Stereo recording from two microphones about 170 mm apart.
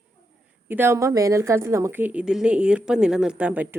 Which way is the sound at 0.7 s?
15° right (ahead or behind).